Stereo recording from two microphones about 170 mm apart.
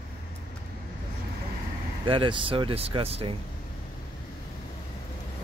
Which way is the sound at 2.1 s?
30° right (ahead or behind).